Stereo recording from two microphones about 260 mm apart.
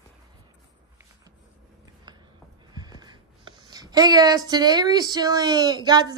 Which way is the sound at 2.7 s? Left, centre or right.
Centre.